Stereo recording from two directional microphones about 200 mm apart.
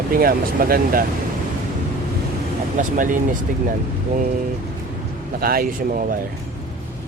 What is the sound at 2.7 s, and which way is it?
Speech, 40° right (ahead or behind).